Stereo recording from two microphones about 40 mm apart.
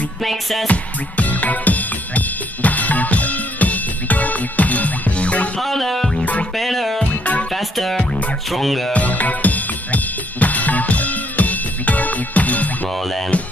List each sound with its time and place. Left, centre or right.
0.2 s music: centre
0.7 s music: left
5.6 s music: centre
8.9 s drum kit: left
13.3 s music: left